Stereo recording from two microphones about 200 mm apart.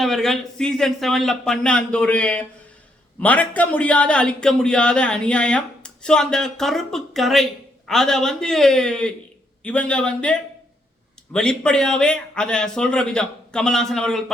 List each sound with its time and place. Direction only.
0.0 s speech: centre (ahead or behind)